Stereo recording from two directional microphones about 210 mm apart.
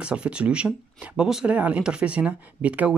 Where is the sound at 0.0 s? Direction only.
5° right (ahead or behind).